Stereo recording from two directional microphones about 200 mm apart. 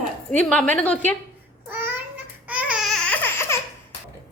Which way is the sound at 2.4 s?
5° right (ahead or behind).